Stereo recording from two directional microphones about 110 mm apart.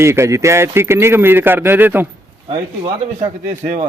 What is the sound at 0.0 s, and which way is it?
A man's voice, 25° right (ahead or behind).